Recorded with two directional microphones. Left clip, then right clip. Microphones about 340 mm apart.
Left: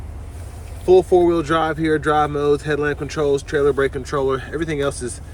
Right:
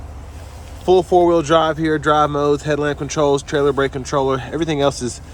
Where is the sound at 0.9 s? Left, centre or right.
Centre.